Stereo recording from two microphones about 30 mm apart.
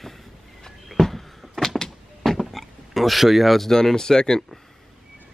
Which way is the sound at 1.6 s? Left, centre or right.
Left.